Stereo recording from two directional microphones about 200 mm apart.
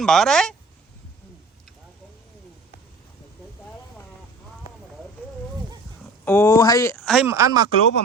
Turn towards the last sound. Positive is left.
turn(degrees=-20)  # may be behind; listen again after turning